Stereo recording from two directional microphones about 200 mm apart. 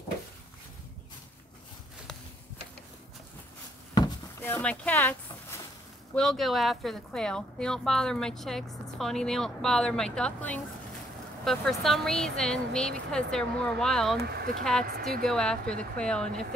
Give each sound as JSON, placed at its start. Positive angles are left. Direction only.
{"t": 3.9, "sound": "a sound", "side_deg": 15}
{"t": 6.1, "sound": "speech", "side_deg": 0}
{"t": 14.2, "sound": "speech", "side_deg": -50}
{"t": 14.6, "sound": "speech", "side_deg": 5}